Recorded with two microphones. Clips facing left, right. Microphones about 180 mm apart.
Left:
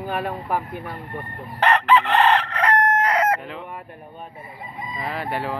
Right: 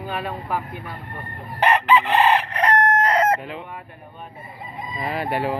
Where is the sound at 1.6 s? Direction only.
10° right (ahead or behind).